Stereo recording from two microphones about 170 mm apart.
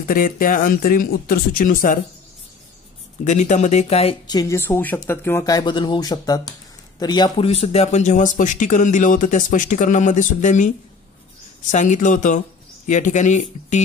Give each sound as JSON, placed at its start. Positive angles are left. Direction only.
{"t": 0.1, "sound": "speech", "side_deg": 55}
{"t": 3.3, "sound": "speech", "side_deg": 45}
{"t": 4.3, "sound": "speech", "side_deg": 20}
{"t": 11.7, "sound": "speech", "side_deg": 45}